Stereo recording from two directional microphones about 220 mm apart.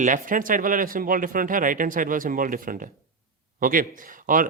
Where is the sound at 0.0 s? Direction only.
35° right (ahead or behind).